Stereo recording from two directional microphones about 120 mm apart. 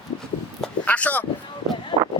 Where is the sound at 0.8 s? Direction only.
10° left (ahead or behind).